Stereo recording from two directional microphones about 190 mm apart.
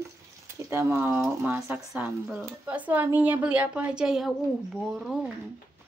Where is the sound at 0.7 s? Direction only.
10° right (ahead or behind).